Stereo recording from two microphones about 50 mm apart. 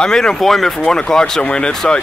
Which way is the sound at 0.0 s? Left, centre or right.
Centre.